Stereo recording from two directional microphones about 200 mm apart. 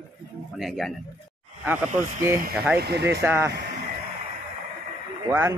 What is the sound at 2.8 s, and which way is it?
Speech, 55° right (ahead or behind).